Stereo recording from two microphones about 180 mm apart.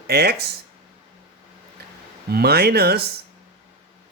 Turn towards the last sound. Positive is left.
turn(degrees=-60)  # may be behind; listen again after turning